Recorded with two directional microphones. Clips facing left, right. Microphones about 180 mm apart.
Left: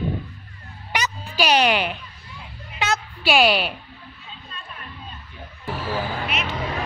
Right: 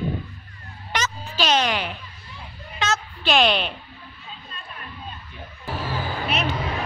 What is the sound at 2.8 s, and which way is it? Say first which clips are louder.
Music: left 1 dB; 10° left (ahead or behind).